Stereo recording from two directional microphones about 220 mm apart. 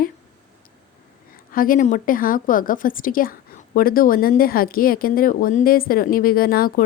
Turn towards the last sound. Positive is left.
turn(degrees=40)  # may be behind; listen again after turning